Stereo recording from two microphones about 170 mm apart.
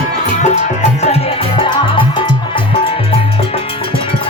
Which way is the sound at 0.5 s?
40° left (ahead or behind).